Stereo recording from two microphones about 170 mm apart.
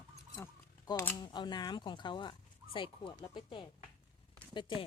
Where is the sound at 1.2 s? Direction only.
25° left (ahead or behind).